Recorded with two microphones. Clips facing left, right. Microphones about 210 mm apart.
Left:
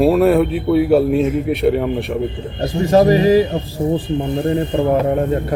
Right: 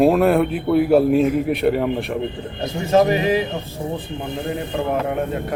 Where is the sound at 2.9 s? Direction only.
35° left (ahead or behind).